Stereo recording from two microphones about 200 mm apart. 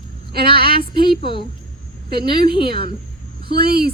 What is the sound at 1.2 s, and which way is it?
A woman's voice, 25° left (ahead or behind).